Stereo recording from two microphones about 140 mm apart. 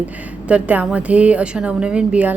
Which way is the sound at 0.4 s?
10° right (ahead or behind).